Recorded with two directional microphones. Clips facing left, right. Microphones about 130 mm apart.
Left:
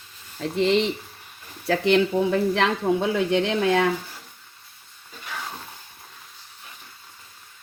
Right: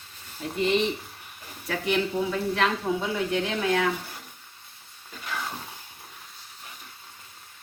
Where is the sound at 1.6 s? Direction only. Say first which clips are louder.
Left 7 dB; 80° left.